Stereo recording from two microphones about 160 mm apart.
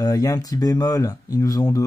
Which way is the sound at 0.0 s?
25° left (ahead or behind).